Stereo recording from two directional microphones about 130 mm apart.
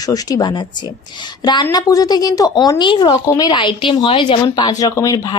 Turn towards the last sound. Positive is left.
turn(degrees=30)  # may be behind; listen again after turning